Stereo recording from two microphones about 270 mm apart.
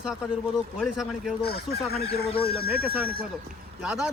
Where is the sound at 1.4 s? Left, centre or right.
Left.